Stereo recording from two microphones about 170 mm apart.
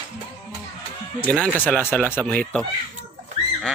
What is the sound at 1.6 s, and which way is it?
Speech, 10° left (ahead or behind).